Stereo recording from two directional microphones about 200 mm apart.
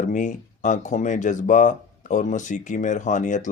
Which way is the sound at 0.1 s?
40° left (ahead or behind).